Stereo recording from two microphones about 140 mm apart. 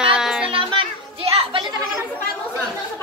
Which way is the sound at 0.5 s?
40° right (ahead or behind).